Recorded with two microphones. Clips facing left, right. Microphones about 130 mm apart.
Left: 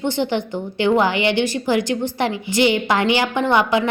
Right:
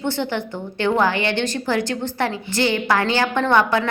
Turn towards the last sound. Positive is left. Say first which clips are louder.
# even
turn(degrees=15)  # may be behind; listen again after turning